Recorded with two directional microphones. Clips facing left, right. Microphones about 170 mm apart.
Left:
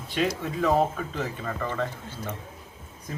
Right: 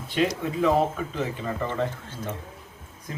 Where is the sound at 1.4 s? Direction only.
20° right (ahead or behind).